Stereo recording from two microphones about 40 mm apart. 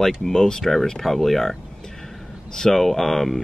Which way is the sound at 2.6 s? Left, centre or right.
Centre.